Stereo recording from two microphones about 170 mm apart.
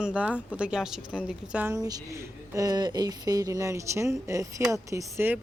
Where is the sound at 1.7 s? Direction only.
20° right (ahead or behind).